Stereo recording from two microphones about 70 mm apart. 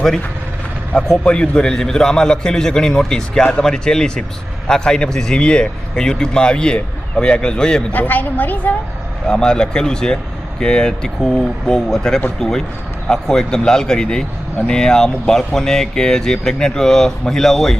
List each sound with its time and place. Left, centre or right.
1.2 s a man's voice: centre
7.9 s a woman's voice: left
9.2 s a man's voice: centre